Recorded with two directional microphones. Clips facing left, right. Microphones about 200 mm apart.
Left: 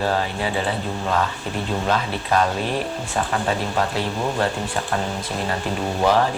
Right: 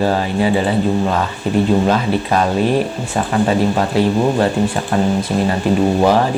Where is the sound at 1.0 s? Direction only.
20° right (ahead or behind).